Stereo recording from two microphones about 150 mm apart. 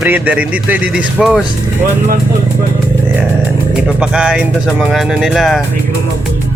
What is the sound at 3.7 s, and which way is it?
Speech, 5° right (ahead or behind).